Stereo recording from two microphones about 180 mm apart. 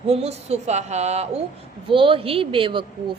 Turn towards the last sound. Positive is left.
turn(degrees=-30)  # may be behind; listen again after turning